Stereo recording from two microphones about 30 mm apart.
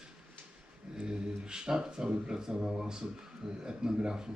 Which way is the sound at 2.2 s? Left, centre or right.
Right.